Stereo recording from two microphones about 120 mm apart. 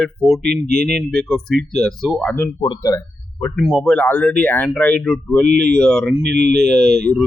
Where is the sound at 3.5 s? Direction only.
Centre (ahead or behind).